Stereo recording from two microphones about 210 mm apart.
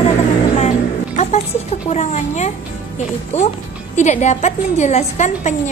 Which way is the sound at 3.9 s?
35° left (ahead or behind).